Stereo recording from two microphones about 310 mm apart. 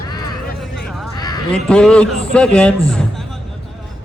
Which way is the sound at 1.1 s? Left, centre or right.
Centre.